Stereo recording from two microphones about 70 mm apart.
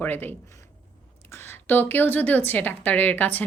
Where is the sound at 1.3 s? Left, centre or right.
Left.